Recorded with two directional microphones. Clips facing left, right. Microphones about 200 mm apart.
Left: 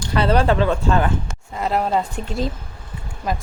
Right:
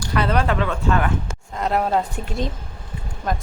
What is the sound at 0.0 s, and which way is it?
Speech, 30° left (ahead or behind).